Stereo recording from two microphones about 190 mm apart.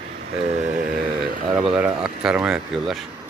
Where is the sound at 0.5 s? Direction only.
40° right (ahead or behind).